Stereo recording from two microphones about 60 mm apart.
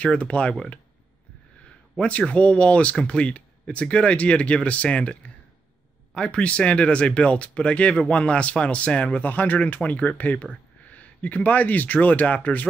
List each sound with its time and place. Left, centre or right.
0.0 s speech: centre
2.0 s speech: left
6.1 s speech: centre